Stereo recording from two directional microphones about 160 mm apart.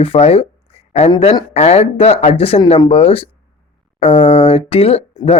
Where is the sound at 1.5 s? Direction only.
40° left (ahead or behind).